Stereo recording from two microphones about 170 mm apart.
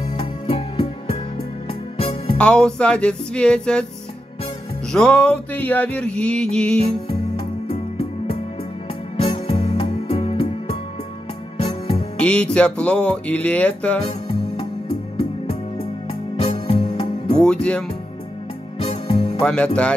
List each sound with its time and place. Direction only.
0.2 s music: 35° left (ahead or behind)
2.3 s mantra: 5° left (ahead or behind)
4.9 s mantra: 5° left (ahead or behind)
7.7 s music: 35° left (ahead or behind)
12.2 s speech: 5° left (ahead or behind)
16.3 s music: 35° left (ahead or behind)
17.5 s mantra: 5° left (ahead or behind)
18.8 s music: 30° left (ahead or behind)
19.4 s speech: 5° left (ahead or behind)